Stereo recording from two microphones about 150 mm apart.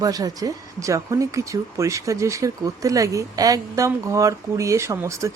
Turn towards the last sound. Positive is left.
turn(degrees=-20)  # may be behind; listen again after turning